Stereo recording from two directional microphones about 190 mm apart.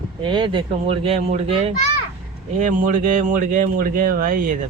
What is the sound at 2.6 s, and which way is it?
Speech, 45° right (ahead or behind).